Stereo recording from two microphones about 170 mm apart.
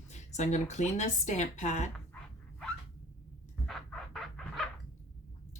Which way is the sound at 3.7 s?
Centre (ahead or behind).